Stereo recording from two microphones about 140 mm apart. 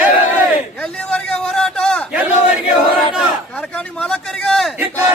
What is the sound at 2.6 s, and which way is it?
Battle cry, 35° left (ahead or behind).